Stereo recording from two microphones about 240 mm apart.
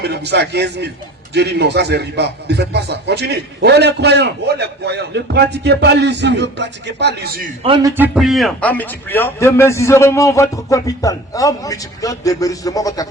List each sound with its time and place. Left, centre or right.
0.0 s a man's voice: right
7.6 s a man's voice: centre